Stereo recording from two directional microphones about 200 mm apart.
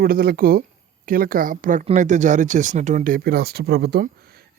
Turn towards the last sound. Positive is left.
turn(degrees=-50)  # may be behind; listen again after turning